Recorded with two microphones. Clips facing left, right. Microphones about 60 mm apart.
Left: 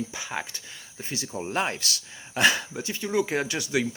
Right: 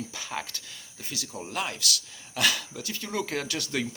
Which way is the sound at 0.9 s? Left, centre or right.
Left.